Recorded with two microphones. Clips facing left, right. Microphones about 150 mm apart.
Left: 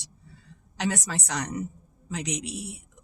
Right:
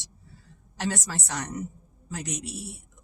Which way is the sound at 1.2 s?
65° left (ahead or behind).